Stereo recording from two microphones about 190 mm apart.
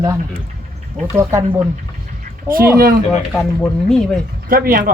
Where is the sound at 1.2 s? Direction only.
15° right (ahead or behind).